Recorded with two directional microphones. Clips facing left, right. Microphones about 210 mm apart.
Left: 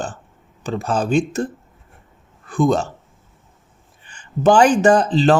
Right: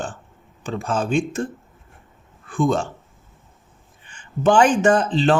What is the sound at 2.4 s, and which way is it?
Speech, 40° left (ahead or behind).